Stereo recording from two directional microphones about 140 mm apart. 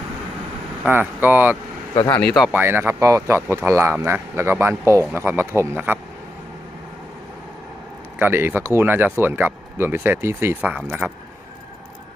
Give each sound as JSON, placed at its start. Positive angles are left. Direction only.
{"t": 0.9, "sound": "speech", "side_deg": -15}
{"t": 2.0, "sound": "speech", "side_deg": 10}
{"t": 2.5, "sound": "speech", "side_deg": -15}
{"t": 8.2, "sound": "speech", "side_deg": -15}